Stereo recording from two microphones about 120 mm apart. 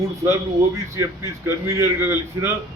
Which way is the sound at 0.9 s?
20° right (ahead or behind).